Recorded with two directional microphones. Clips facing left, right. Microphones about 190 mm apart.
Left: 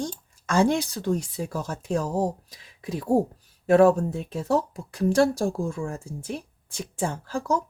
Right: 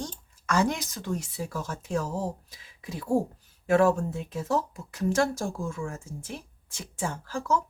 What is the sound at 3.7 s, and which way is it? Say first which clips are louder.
Speech: left 5 dB; 35° left (ahead or behind).